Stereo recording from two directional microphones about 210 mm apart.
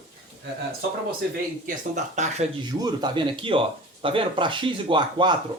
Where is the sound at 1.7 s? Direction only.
35° right (ahead or behind).